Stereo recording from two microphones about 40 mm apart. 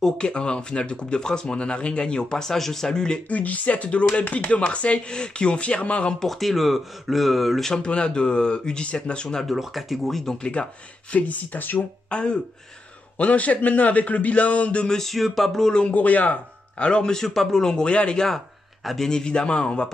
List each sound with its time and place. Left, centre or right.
0.2 s speech: left
3.3 s speech: left
6.1 s speech: centre
7.8 s speech: left
9.6 s speech: centre
10.4 s speech: left
11.1 s speech: left
12.1 s speech: left
13.2 s a man's voice: left
14.9 s speech: centre
15.9 s a man's voice: left
16.8 s speech: left
17.2 s a man's voice: centre; by 19.9 s left